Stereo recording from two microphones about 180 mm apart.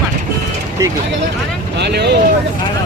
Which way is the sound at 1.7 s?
65° right (ahead or behind).